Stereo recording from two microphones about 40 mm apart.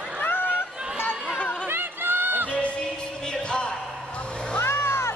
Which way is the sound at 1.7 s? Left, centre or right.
Right.